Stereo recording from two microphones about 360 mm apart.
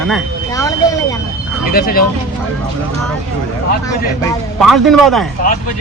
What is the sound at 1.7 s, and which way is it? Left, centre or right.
Speech, left.